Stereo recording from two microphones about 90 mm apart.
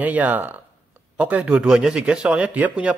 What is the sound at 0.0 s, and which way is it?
A man's voice, 15° right (ahead or behind).